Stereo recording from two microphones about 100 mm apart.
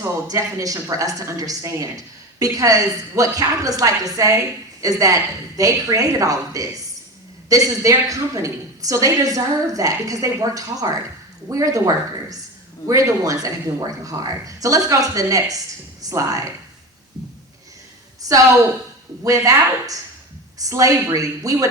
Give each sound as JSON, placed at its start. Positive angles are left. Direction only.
{"t": 0.3, "sound": "speech", "side_deg": -35}
{"t": 18.2, "sound": "a sound", "side_deg": -35}
{"t": 19.2, "sound": "speech", "side_deg": -35}